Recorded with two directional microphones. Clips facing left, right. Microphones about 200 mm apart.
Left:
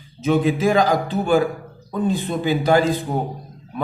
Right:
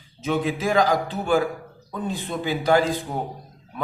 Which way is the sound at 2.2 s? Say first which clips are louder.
Left 4 dB; 20° left (ahead or behind).